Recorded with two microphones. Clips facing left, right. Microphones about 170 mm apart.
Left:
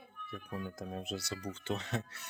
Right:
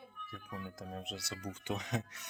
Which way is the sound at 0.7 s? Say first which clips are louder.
Left 4 dB; centre (ahead or behind).